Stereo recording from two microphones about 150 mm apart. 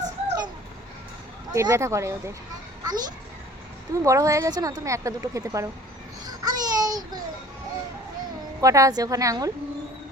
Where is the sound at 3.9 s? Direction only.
20° right (ahead or behind).